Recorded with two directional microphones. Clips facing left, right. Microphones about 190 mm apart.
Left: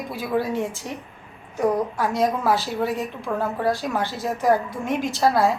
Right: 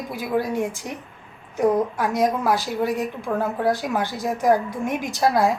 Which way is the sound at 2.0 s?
15° right (ahead or behind).